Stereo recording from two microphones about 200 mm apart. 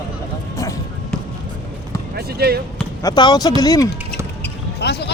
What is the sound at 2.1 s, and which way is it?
Speech, 50° right (ahead or behind).